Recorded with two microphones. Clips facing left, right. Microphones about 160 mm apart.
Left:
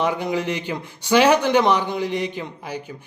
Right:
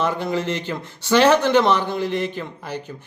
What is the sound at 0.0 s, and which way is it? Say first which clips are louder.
A man's voice: even; 15° left (ahead or behind).